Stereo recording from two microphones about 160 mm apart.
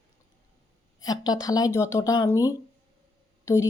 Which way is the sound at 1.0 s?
25° left (ahead or behind).